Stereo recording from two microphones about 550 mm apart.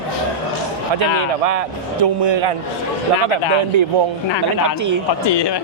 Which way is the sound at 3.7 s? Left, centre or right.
Right.